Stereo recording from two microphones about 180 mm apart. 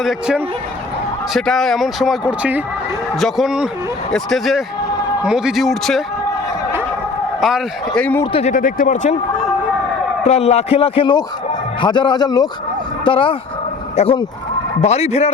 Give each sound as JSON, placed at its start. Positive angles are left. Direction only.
{"t": 0.0, "sound": "speech", "side_deg": -5}
{"t": 7.4, "sound": "speech", "side_deg": 5}
{"t": 8.2, "sound": "speech", "side_deg": 30}
{"t": 8.5, "sound": "speech", "side_deg": 45}
{"t": 10.2, "sound": "a man's voice", "side_deg": 35}